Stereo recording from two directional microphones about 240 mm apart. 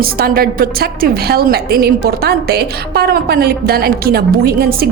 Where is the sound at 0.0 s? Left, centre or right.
Right.